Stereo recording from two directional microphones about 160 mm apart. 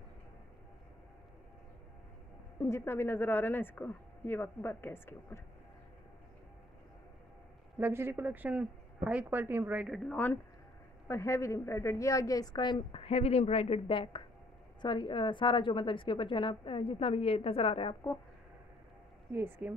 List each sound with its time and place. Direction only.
2.6 s a woman's voice: 15° left (ahead or behind)
7.8 s a woman's voice: 15° right (ahead or behind); by 17.9 s 35° left (ahead or behind)
19.3 s a woman's voice: 15° right (ahead or behind)